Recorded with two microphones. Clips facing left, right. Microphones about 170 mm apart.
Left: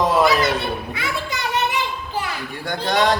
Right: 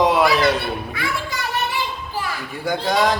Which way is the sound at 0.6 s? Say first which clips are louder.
Even; 20° left (ahead or behind).